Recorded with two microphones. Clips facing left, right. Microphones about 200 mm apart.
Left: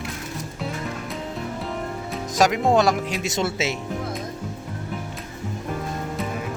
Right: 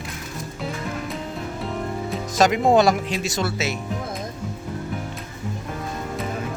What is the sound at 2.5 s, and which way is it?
Speech, centre (ahead or behind).